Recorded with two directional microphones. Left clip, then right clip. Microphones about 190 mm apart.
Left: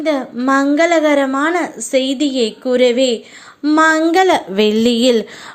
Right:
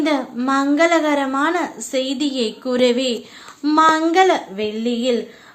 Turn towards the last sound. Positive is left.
turn(degrees=50)  # may be behind; listen again after turning